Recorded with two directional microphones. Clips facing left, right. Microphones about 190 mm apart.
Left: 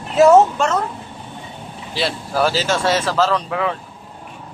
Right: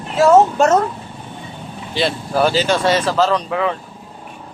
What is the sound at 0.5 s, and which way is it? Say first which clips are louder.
Speech: right 6 dB; 45° right (ahead or behind).